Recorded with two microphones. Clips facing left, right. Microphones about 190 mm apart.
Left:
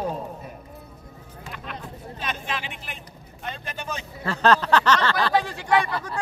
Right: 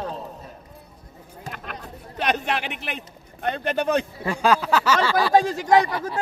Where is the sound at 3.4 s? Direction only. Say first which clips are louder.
Right 11 dB; 65° right (ahead or behind).